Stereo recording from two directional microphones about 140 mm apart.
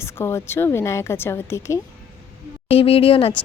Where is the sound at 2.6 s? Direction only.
45° left (ahead or behind).